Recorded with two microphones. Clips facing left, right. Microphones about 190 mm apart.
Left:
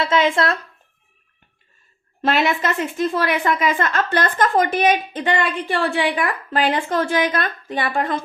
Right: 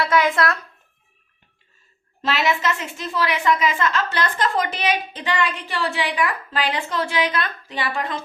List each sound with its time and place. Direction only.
0.0 s speech: 25° left (ahead or behind)
2.2 s a woman's voice: 55° left (ahead or behind)